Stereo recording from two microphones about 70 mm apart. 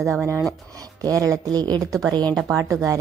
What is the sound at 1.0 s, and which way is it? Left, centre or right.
Speech, right.